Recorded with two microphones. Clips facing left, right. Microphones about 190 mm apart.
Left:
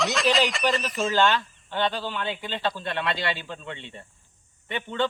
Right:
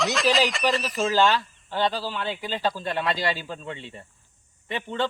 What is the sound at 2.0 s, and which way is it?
Speech, 5° right (ahead or behind).